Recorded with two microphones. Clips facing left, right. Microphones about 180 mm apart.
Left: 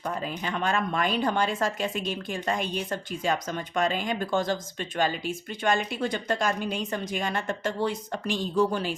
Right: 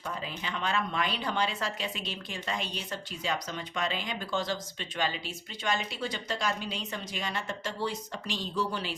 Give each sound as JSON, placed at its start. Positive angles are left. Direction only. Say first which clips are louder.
{"t": 0.0, "sound": "speech", "louder": "left 6 dB", "side_deg": 45}